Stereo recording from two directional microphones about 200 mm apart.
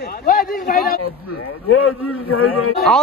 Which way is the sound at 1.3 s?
90° left.